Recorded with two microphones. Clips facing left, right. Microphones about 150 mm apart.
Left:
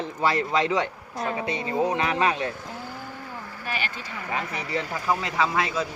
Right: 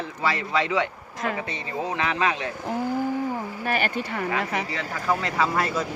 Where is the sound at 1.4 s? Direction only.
15° left (ahead or behind).